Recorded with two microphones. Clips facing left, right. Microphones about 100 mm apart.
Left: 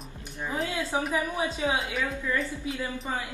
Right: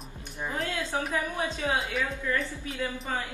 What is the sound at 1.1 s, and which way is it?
Speech, 15° left (ahead or behind).